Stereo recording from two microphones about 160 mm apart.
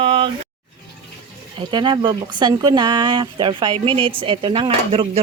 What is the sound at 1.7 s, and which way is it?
Speech, 25° right (ahead or behind).